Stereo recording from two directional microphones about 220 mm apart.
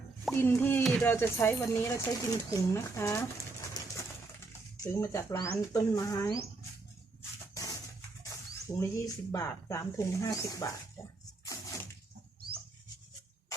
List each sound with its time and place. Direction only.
0.3 s speech: 10° left (ahead or behind)
3.8 s pigeon: 20° left (ahead or behind)
4.8 s speech: 15° left (ahead or behind)
7.2 s a sound: 15° left (ahead or behind)
8.2 s speech: 15° left (ahead or behind)
11.4 s a sound: 15° left (ahead or behind)